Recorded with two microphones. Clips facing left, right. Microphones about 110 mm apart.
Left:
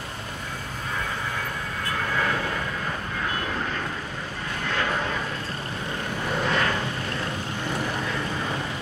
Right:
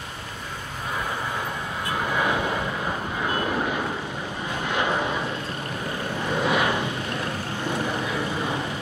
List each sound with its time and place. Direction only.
1.9 s vehicle: 15° right (ahead or behind)
4.6 s a sound: 15° right (ahead or behind)
6.4 s vehicle: 15° right (ahead or behind)